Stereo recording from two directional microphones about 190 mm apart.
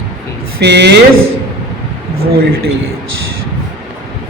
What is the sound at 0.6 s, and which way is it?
Speech, 60° right (ahead or behind).